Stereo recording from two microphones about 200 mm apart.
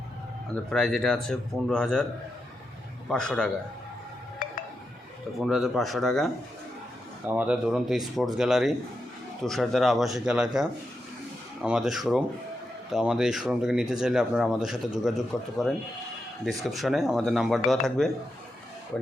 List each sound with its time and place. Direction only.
0.5 s speech: 5° left (ahead or behind)
3.1 s speech: 5° left (ahead or behind)
4.4 s music: 40° left (ahead or behind)
5.5 s speech: centre (ahead or behind)